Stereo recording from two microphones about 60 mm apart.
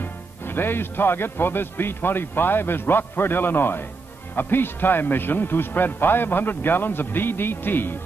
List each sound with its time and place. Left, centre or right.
0.0 s speech: left